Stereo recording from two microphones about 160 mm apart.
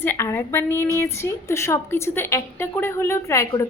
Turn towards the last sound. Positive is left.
turn(degrees=20)  # may be behind; listen again after turning